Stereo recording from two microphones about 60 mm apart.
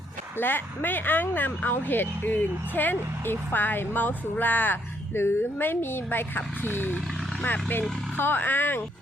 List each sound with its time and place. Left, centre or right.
0.3 s speech: left